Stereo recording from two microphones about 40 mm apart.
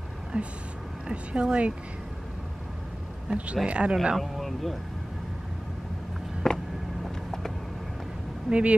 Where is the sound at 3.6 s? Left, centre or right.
Right.